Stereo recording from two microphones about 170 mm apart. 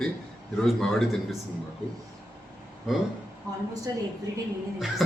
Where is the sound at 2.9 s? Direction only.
Centre (ahead or behind).